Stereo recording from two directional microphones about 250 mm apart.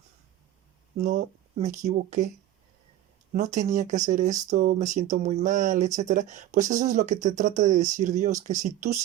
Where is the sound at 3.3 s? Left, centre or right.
Right.